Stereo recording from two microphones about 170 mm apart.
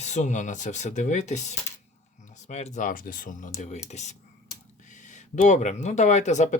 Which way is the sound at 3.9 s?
45° left (ahead or behind).